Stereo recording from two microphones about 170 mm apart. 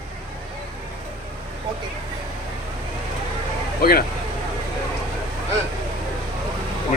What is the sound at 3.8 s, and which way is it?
Speech, 60° left (ahead or behind).